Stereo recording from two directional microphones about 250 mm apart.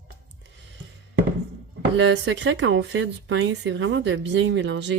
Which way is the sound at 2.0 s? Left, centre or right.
Right.